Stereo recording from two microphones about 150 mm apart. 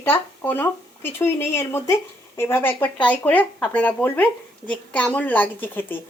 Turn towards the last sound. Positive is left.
turn(degrees=15)  # may be behind; listen again after turning